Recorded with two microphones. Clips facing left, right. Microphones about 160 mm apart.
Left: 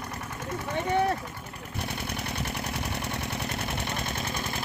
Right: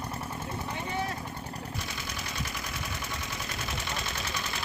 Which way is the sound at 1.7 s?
60° left (ahead or behind).